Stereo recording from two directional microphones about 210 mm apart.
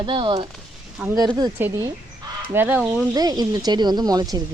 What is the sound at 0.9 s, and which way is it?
Speech, 10° right (ahead or behind).